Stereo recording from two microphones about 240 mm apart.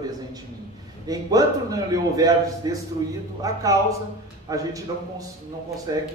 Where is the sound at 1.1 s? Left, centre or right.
Centre.